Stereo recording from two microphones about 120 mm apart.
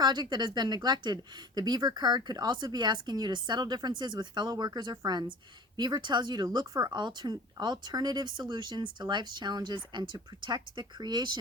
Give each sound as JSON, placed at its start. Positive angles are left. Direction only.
{"t": 0.0, "sound": "speech", "side_deg": -35}